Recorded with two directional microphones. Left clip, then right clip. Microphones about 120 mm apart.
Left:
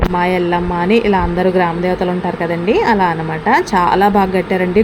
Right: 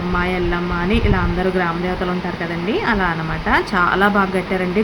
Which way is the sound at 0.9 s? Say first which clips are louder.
Left 8 dB; 35° left (ahead or behind).